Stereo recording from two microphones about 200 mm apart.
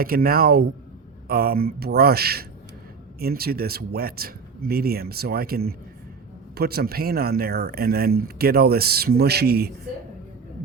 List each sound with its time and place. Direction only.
0.0 s speech: 45° right (ahead or behind)